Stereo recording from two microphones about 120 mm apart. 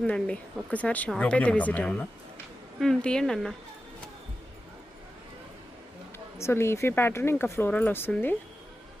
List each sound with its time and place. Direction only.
0.0 s a woman's voice: 10° left (ahead or behind)
6.4 s speech: 20° left (ahead or behind)